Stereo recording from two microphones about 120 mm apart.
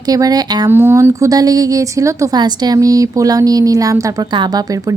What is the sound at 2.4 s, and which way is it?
A woman's voice, 35° right (ahead or behind).